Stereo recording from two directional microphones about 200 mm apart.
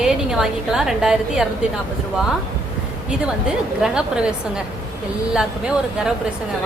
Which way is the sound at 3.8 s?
5° right (ahead or behind).